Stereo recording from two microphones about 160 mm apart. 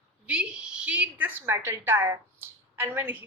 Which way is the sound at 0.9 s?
10° right (ahead or behind).